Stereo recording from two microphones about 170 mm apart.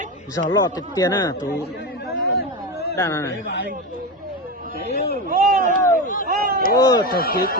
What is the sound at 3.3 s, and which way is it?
Speech, 85° left.